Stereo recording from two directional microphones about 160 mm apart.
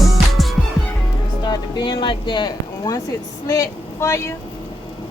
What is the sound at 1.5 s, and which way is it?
Speech, 30° left (ahead or behind).